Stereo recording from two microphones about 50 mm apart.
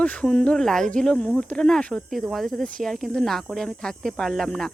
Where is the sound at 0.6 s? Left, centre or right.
Centre.